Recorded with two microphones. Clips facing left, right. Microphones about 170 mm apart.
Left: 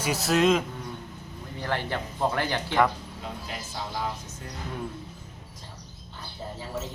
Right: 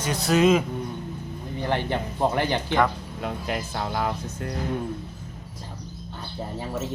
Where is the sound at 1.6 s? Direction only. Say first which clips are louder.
Right 4 dB; 20° right (ahead or behind).